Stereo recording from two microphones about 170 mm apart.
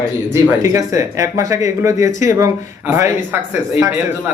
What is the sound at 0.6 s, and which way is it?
A man's voice, 20° right (ahead or behind).